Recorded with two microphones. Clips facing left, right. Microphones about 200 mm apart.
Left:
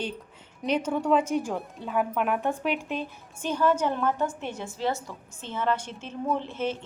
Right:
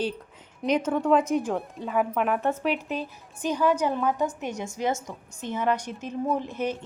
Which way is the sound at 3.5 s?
10° right (ahead or behind).